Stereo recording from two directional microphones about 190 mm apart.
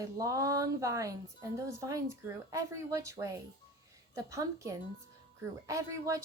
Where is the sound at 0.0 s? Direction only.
15° right (ahead or behind).